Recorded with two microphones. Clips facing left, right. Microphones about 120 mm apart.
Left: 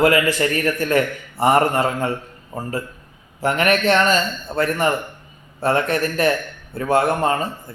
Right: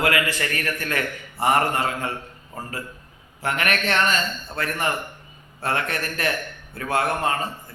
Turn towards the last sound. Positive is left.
turn(degrees=35)  # may be behind; listen again after turning